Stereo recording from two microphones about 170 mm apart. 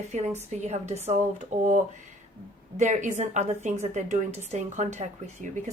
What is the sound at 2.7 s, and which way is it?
A woman's voice, 45° right (ahead or behind).